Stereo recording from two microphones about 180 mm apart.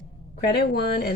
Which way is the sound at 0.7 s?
60° left (ahead or behind).